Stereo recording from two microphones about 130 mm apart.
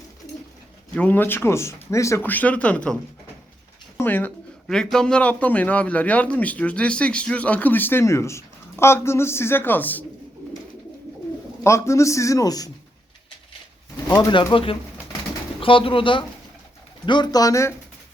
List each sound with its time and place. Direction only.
0.9 s a man's voice: 15° left (ahead or behind)
4.7 s a man's voice: 5° left (ahead or behind)
11.6 s a man's voice: 20° left (ahead or behind)
14.2 s a man's voice: 35° left (ahead or behind)